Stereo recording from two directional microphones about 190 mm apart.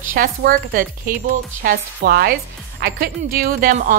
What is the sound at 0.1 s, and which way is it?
Speech, 50° right (ahead or behind).